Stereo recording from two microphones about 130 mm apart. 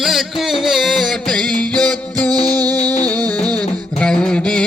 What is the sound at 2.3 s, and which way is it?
Music, 30° right (ahead or behind).